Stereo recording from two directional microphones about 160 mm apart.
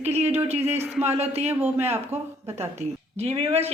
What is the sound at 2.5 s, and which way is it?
Speech, 40° right (ahead or behind).